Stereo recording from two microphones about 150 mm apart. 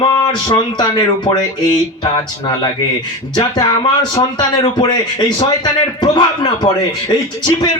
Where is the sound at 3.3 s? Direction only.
30° left (ahead or behind).